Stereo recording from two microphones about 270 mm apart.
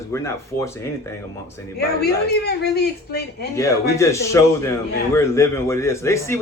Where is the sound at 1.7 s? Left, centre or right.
Left.